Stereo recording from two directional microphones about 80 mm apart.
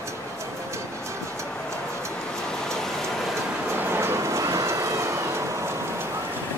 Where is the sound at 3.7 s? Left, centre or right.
Right.